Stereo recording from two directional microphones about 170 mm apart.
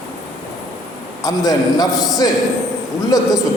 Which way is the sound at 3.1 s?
20° left (ahead or behind).